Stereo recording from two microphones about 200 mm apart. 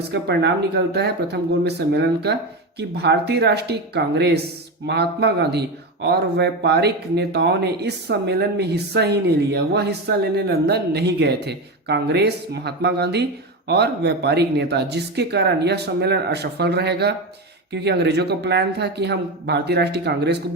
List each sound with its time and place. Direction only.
0.1 s speech: 55° right (ahead or behind)